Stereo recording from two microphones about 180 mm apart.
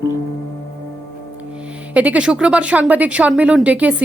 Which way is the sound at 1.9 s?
10° right (ahead or behind).